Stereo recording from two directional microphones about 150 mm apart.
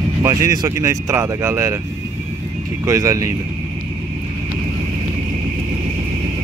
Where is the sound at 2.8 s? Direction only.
20° right (ahead or behind).